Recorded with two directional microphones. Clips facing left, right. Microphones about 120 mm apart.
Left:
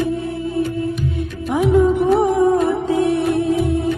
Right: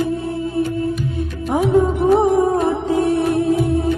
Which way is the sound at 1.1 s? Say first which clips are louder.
Right 1 dB; 40° right (ahead or behind).